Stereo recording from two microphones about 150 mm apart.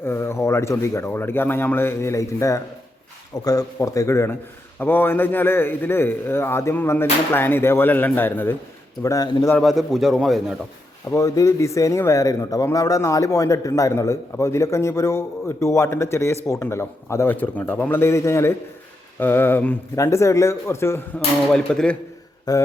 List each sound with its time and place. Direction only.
0.0 s a man's voice: 15° left (ahead or behind)
9.6 s a man's voice: centre (ahead or behind)
11.1 s a man's voice: 20° left (ahead or behind)
21.5 s a man's voice: 5° left (ahead or behind)
22.5 s speech: 25° left (ahead or behind)